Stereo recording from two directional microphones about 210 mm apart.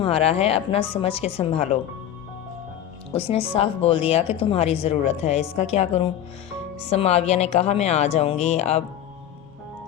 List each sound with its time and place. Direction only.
0.0 s a woman's voice: 30° left (ahead or behind)
3.1 s a woman's voice: 25° left (ahead or behind)